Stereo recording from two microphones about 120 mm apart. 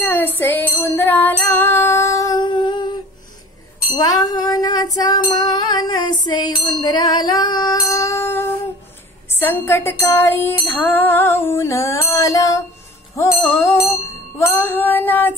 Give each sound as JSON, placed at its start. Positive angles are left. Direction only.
{"t": 0.0, "sound": "music", "side_deg": 15}
{"t": 9.3, "sound": "female singing", "side_deg": 20}
{"t": 13.1, "sound": "music", "side_deg": 25}
{"t": 13.5, "sound": "female singing", "side_deg": 20}